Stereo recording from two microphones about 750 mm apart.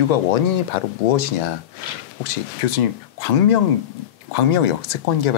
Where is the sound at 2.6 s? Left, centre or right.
Left.